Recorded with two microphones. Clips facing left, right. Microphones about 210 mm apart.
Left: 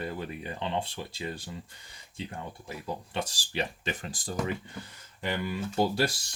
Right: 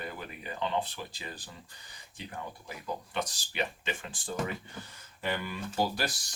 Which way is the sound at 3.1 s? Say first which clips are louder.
Left 4 dB; 30° left (ahead or behind).